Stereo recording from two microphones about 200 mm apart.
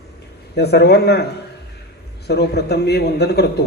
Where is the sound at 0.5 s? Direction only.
55° left (ahead or behind).